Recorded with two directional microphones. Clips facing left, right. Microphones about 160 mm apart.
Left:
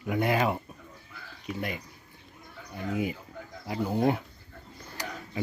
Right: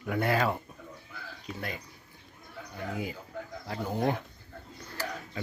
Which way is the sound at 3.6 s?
10° left (ahead or behind).